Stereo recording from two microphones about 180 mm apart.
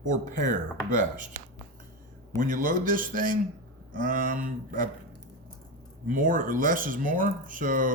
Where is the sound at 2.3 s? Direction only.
50° right (ahead or behind).